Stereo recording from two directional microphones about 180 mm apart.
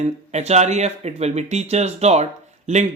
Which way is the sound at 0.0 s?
40° right (ahead or behind).